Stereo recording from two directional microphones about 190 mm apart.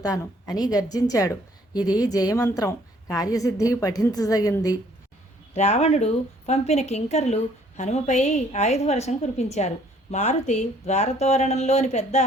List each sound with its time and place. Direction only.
0.0 s a woman's voice: 20° left (ahead or behind)
5.5 s speech: 35° left (ahead or behind)